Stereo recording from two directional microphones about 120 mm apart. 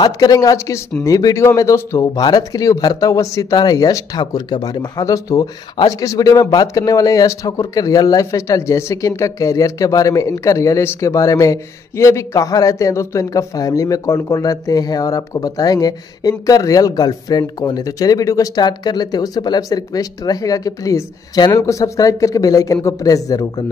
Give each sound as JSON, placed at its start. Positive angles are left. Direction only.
{"t": 0.0, "sound": "speech", "side_deg": 35}